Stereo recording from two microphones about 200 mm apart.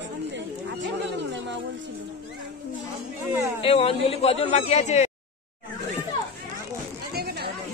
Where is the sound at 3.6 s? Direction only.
30° left (ahead or behind).